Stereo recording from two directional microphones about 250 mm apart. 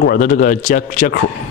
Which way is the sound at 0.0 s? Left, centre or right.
Left.